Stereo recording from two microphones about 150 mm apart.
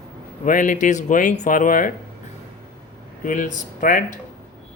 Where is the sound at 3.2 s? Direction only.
65° left (ahead or behind).